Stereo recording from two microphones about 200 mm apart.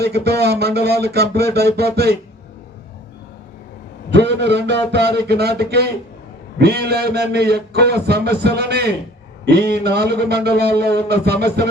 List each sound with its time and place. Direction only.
0.0 s a man's voice: 55° right (ahead or behind)
0.9 s a sound: 55° right (ahead or behind)
4.1 s a man's voice: 60° right (ahead or behind)